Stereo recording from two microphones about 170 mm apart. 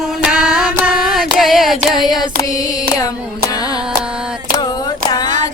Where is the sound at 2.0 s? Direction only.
Centre (ahead or behind).